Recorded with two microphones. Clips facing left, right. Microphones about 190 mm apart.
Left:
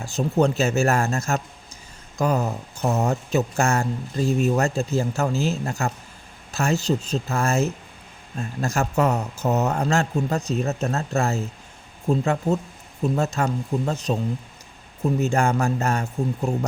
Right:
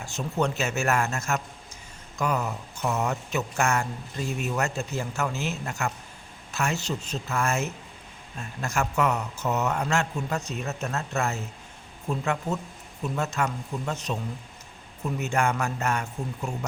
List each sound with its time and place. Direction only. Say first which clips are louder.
0.0 s speech: left 7 dB; 35° left (ahead or behind)